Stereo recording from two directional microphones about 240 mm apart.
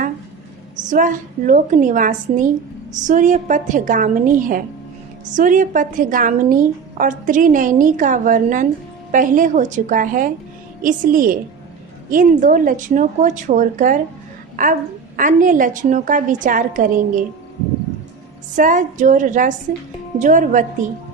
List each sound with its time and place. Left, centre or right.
0.9 s a woman's voice: right
18.5 s a woman's voice: right